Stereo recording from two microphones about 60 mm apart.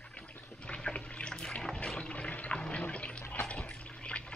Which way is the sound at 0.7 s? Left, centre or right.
Centre.